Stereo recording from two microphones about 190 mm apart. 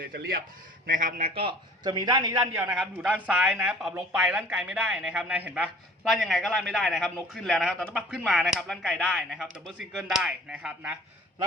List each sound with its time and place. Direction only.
0.0 s speech: 55° right (ahead or behind)
1.3 s a man's voice: 30° right (ahead or behind)
2.6 s speech: 5° right (ahead or behind)